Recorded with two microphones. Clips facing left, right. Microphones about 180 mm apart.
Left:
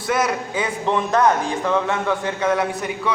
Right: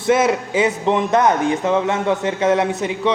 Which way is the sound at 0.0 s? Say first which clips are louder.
Right 5 dB; 25° right (ahead or behind).